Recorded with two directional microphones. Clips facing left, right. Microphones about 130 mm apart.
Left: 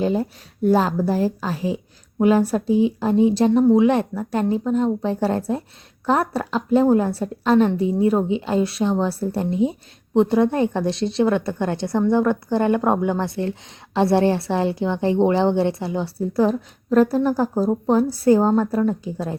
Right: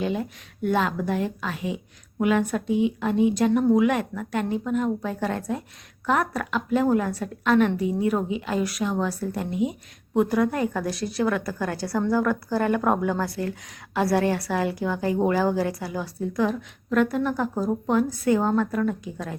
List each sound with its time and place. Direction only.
0.0 s a woman's voice: 35° left (ahead or behind)